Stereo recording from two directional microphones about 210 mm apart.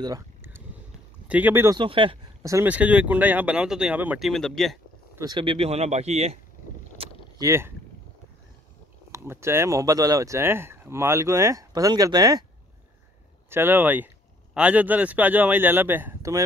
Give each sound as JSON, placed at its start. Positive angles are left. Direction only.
{"t": 0.0, "sound": "a sound", "side_deg": -15}
{"t": 1.2, "sound": "speech", "side_deg": -5}
{"t": 1.8, "sound": "speech", "side_deg": -25}
{"t": 5.1, "sound": "speech", "side_deg": -20}
{"t": 7.0, "sound": "vehicle", "side_deg": -15}
{"t": 9.1, "sound": "speech", "side_deg": -10}
{"t": 13.5, "sound": "speech", "side_deg": -10}